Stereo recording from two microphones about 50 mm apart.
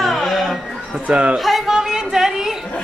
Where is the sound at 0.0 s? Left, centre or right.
Centre.